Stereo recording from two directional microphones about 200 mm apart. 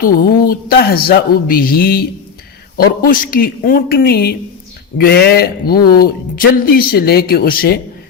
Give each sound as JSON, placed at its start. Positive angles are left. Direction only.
{"t": 0.0, "sound": "speech", "side_deg": 45}